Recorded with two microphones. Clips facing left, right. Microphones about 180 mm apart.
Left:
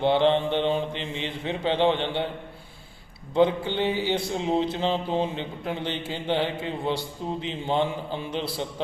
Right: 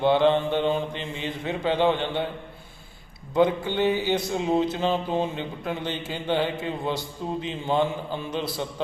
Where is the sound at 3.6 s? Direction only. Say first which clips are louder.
Right 2 dB; 20° left (ahead or behind).